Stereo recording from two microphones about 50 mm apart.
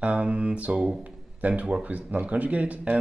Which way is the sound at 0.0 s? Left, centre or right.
Right.